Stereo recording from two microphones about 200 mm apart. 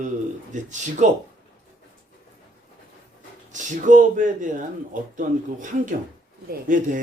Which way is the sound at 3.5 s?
40° right (ahead or behind).